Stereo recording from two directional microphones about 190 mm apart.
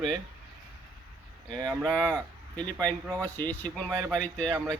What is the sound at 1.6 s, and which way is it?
A man's voice, 5° left (ahead or behind).